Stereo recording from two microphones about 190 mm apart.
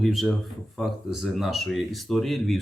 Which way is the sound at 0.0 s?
Centre (ahead or behind).